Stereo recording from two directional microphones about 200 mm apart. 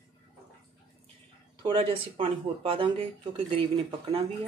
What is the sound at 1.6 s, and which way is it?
Speech, 25° right (ahead or behind).